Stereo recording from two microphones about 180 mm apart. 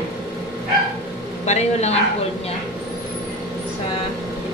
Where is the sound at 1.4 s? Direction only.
40° left (ahead or behind).